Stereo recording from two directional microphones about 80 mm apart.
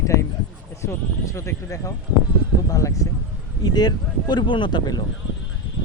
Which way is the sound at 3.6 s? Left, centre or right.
Left.